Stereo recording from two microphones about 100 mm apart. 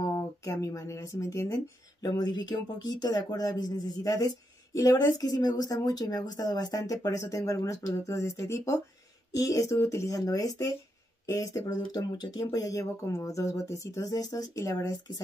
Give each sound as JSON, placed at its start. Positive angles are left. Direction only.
{"t": 0.0, "sound": "speech", "side_deg": 35}